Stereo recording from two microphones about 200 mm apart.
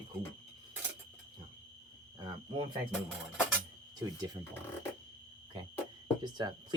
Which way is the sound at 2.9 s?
5° right (ahead or behind).